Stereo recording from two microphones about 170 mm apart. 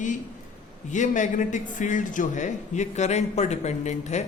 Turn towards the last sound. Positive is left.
turn(degrees=40)  # may be behind; listen again after turning